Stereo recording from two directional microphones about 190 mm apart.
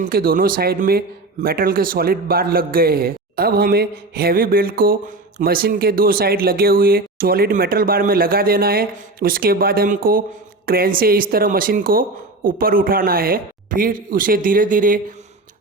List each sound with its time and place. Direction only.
0.0 s speech: 50° right (ahead or behind)